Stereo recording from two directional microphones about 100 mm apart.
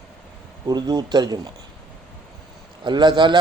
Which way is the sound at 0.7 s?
45° right (ahead or behind).